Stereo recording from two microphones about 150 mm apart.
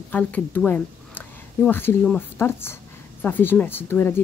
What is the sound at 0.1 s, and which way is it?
Speech, 10° left (ahead or behind).